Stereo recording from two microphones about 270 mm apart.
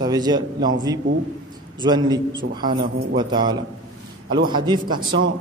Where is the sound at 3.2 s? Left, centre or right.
Centre.